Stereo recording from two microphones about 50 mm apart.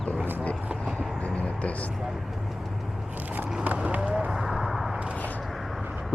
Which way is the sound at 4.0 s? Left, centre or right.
Centre.